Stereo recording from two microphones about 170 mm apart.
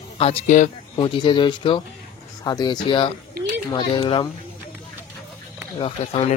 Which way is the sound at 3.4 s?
65° right (ahead or behind).